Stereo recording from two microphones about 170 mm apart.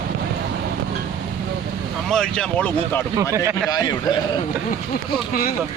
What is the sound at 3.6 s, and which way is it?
Speech, 25° left (ahead or behind).